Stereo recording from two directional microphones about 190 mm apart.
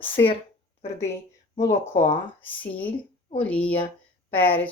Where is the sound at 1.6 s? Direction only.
35° left (ahead or behind).